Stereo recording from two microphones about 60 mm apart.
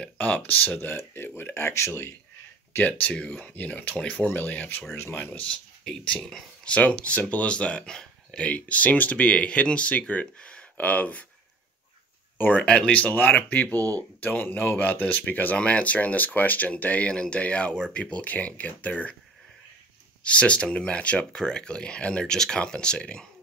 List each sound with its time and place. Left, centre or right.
0.0 s speech: left
2.7 s speech: left
4.3 s speech: left
5.5 s speech: centre
12.4 s speech: left
13.0 s speech: left
20.2 s speech: centre